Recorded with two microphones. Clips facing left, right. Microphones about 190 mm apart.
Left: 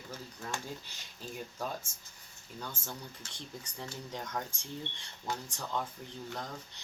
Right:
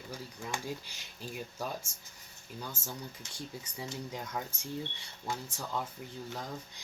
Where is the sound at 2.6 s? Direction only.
10° right (ahead or behind).